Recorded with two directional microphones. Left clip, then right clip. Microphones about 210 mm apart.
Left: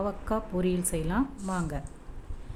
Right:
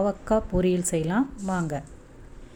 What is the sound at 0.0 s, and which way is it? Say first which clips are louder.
Speech: right 7 dB; 15° right (ahead or behind).